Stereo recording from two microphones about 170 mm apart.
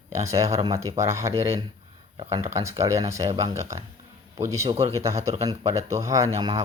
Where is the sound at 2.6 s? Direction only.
20° right (ahead or behind).